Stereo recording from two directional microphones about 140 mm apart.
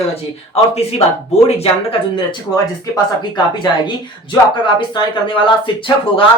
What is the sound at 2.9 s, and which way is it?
Speech, 30° left (ahead or behind).